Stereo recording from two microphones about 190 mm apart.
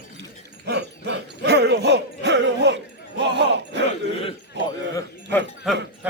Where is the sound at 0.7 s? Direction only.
65° right (ahead or behind).